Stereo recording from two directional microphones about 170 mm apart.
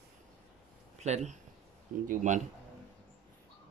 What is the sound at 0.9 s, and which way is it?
Speech, 40° right (ahead or behind).